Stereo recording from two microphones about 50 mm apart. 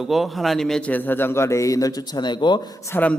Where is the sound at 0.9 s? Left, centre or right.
Left.